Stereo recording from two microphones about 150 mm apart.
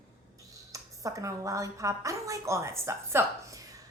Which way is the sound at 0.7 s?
20° right (ahead or behind).